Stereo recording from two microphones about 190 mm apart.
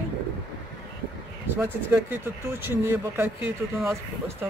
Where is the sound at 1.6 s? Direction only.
10° right (ahead or behind).